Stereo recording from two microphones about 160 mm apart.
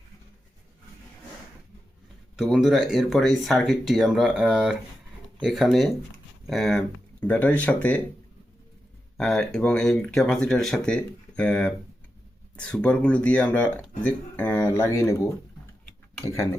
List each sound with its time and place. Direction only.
2.4 s speech: centre (ahead or behind)
9.1 s speech: 5° left (ahead or behind)